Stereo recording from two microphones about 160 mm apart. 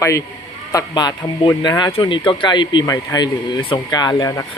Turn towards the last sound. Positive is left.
turn(degrees=25)  # may be behind; listen again after turning